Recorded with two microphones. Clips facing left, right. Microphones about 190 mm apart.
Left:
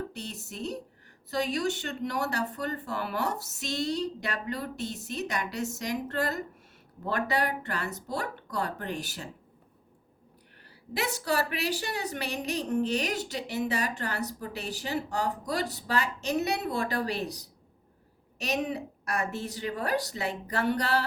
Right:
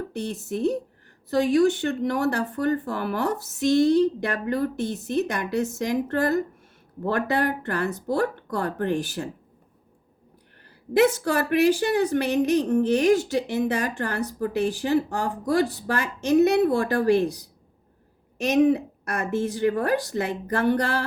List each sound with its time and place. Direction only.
0.2 s a woman's voice: 55° right (ahead or behind)
11.0 s a woman's voice: 50° right (ahead or behind)
18.5 s a woman's voice: 55° right (ahead or behind)